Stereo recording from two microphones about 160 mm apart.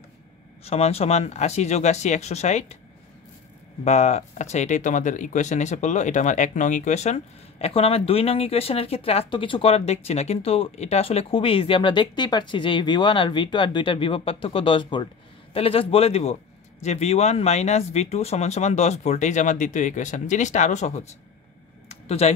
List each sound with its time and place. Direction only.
0.7 s speech: 40° left (ahead or behind)
3.8 s speech: 45° left (ahead or behind)
21.8 s a sound: 40° left (ahead or behind)